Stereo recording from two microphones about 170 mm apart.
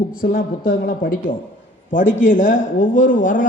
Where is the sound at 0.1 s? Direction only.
60° left (ahead or behind).